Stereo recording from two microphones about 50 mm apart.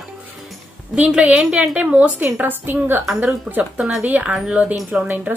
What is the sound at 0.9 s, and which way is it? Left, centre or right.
Speech, right.